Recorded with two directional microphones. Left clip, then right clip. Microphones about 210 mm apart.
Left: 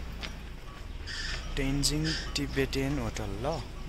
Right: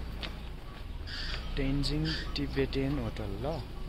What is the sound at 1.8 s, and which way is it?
Speech, 15° left (ahead or behind).